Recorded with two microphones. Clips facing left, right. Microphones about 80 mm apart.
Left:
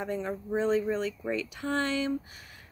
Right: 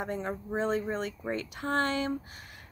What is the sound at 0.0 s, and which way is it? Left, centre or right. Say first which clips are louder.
Speech: left 1 dB; right.